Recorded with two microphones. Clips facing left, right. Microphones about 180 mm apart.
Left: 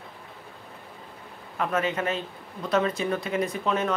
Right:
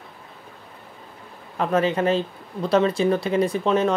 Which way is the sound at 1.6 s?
30° right (ahead or behind).